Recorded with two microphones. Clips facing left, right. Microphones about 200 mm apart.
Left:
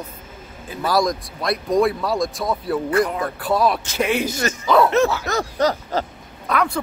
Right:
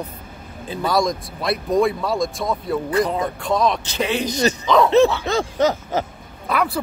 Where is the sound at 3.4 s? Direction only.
5° left (ahead or behind).